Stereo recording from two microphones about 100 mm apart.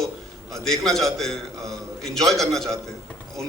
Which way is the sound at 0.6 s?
5° left (ahead or behind).